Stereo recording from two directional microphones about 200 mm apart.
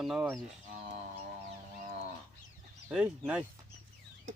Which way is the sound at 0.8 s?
35° right (ahead or behind).